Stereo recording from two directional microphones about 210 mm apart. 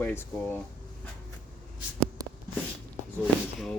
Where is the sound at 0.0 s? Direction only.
10° left (ahead or behind).